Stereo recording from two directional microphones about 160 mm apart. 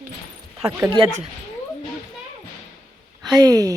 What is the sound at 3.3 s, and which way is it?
Speech, 25° right (ahead or behind).